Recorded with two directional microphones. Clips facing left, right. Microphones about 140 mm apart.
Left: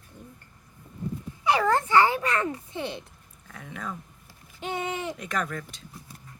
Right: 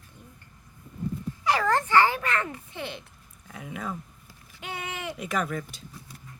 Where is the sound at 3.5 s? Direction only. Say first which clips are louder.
Right 2 dB; 10° right (ahead or behind).